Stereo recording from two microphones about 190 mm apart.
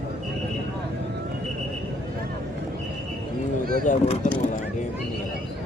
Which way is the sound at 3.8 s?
40° left (ahead or behind).